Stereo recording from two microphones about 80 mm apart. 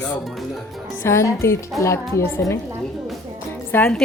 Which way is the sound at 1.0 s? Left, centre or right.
Left.